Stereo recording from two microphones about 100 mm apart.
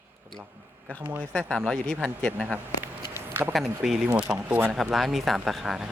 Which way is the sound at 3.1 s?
20° right (ahead or behind).